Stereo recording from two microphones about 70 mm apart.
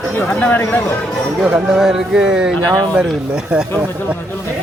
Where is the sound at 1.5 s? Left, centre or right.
Centre.